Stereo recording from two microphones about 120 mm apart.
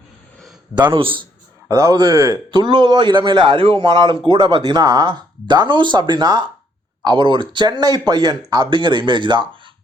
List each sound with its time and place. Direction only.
0.9 s a man's voice: 45° right (ahead or behind)
1.6 s speech: 25° right (ahead or behind)
2.5 s speech: 40° right (ahead or behind)